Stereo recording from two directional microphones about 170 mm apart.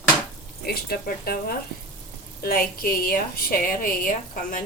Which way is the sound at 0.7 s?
65° left (ahead or behind).